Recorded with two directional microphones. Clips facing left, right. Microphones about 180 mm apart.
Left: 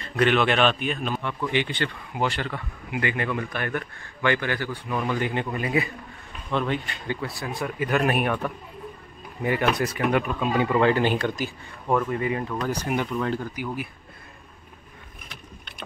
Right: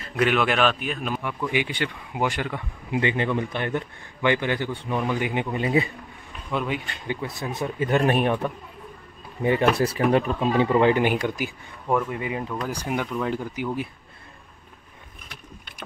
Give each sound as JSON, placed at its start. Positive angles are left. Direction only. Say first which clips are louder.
{"t": 0.0, "sound": "speech", "louder": "left 1 dB", "side_deg": -5}
{"t": 6.5, "sound": "speech", "louder": "left 1 dB", "side_deg": -10}